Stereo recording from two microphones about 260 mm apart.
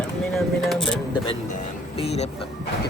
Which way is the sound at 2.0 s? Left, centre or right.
Left.